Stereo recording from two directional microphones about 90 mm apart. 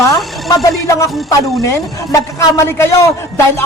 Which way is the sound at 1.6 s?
35° left (ahead or behind).